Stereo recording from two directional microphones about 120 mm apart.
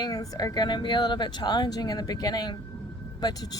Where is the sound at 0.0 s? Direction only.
30° left (ahead or behind).